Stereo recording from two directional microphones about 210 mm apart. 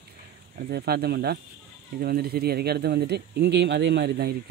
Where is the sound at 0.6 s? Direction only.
50° right (ahead or behind).